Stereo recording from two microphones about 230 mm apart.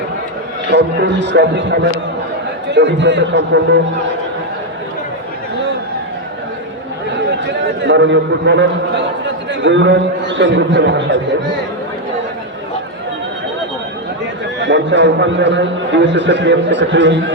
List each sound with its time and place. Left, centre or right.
0.7 s a man's voice: right
7.9 s a man's voice: right
14.6 s a man's voice: right